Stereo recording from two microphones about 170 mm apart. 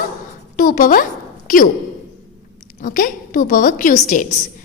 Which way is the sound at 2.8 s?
55° left (ahead or behind).